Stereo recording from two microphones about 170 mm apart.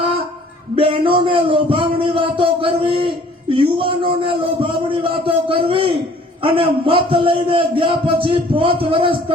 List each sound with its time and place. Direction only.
0.8 s a man's voice: 30° right (ahead or behind)